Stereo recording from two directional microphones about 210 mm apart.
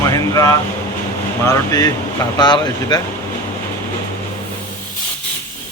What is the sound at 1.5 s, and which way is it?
Speech, 15° left (ahead or behind).